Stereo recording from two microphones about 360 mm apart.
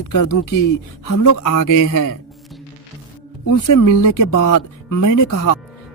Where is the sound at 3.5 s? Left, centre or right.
Left.